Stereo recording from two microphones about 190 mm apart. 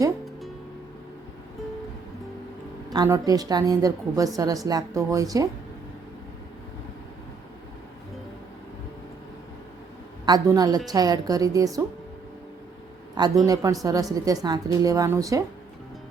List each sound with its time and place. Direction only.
2.9 s a woman's voice: 20° right (ahead or behind)
10.2 s a woman's voice: 20° right (ahead or behind)
13.4 s a woman's voice: 20° right (ahead or behind)